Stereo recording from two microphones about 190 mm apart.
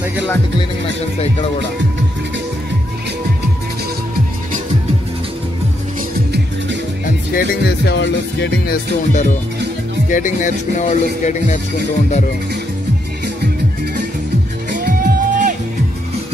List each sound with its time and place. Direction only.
7.3 s music: 60° left (ahead or behind)
9.1 s music: 40° left (ahead or behind)
14.7 s music: 45° right (ahead or behind)